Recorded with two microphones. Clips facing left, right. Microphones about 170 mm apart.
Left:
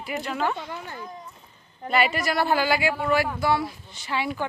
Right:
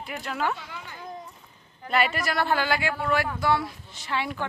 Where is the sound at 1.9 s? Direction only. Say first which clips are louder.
Left 2 dB; centre (ahead or behind).